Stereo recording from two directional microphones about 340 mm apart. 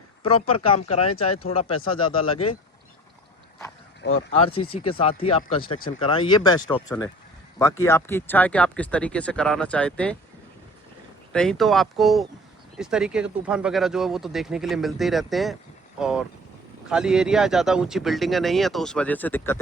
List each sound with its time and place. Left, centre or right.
0.2 s speech: centre
1.2 s speech: left
1.5 s speech: centre
4.3 s speech: centre
11.3 s speech: centre